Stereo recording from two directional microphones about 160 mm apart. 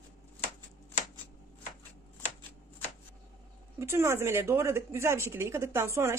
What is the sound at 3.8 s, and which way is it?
Speech, 15° right (ahead or behind).